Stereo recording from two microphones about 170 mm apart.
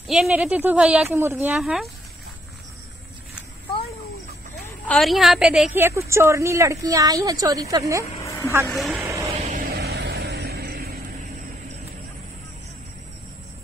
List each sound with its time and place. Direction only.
0.1 s a woman's voice: 5° right (ahead or behind)
1.5 s speech: centre (ahead or behind)
4.9 s a woman's voice: centre (ahead or behind); by 7.8 s 20° right (ahead or behind)
8.2 s a sound: 15° left (ahead or behind)
8.6 s speech: centre (ahead or behind)
9.0 s vehicle: 15° right (ahead or behind)
9.3 s vehicle: 50° right (ahead or behind)
9.8 s vehicle: 80° right